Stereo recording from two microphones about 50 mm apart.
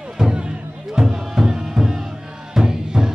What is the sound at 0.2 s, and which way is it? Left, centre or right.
Music, centre.